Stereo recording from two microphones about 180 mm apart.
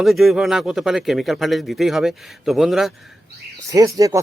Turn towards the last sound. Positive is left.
turn(degrees=-20)  # may be behind; listen again after turning